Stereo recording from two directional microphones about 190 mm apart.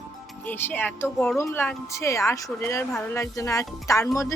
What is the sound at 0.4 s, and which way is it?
Speech, 10° left (ahead or behind).